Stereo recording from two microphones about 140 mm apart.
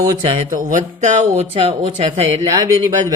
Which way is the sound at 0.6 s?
65° right (ahead or behind).